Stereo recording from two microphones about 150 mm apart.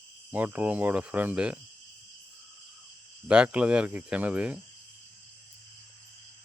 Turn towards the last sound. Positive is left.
turn(degrees=-10)  # may be behind; listen again after turning